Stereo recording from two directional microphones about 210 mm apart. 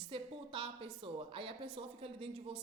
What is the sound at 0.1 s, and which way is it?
A woman's voice, 25° right (ahead or behind).